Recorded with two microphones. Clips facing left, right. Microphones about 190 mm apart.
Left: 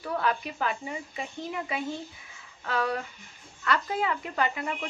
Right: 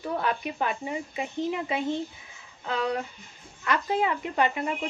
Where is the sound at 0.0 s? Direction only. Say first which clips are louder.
Right 1 dB; 20° right (ahead or behind).